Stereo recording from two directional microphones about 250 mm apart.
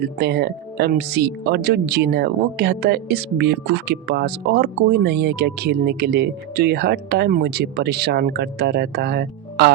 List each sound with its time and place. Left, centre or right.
0.2 s speech: right